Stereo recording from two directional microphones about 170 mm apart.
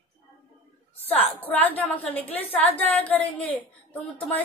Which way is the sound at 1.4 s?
10° left (ahead or behind).